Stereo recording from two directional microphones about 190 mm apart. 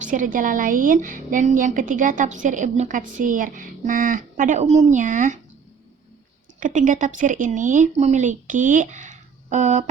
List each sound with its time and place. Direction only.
0.0 s a woman's voice: 45° right (ahead or behind)
6.6 s speech: 45° right (ahead or behind)